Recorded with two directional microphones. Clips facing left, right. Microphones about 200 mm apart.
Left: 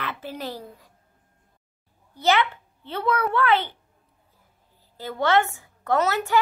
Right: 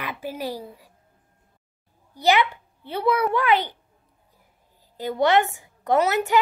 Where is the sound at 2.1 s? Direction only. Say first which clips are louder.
Right 1 dB; 15° right (ahead or behind).